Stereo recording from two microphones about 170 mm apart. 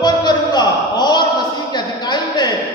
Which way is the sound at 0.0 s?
25° left (ahead or behind).